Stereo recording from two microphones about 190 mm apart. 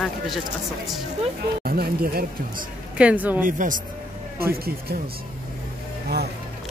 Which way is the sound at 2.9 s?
5° right (ahead or behind).